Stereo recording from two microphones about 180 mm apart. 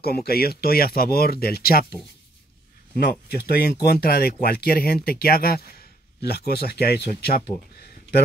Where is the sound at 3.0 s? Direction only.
65° left (ahead or behind).